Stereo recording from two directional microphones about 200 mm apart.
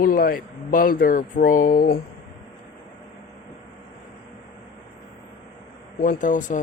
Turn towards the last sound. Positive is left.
turn(degrees=40)  # may be behind; listen again after turning